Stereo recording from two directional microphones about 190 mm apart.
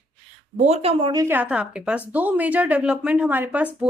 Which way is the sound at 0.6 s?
35° right (ahead or behind).